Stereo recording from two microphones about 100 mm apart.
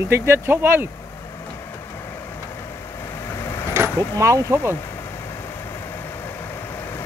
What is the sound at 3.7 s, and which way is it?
Speech, 30° right (ahead or behind).